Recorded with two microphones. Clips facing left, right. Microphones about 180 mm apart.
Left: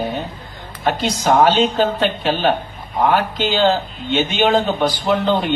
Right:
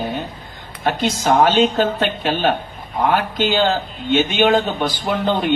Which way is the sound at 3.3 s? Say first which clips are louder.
Left 1 dB; 50° right (ahead or behind).